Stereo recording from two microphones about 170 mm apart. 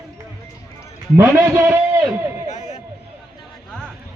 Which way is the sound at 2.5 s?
45° left (ahead or behind).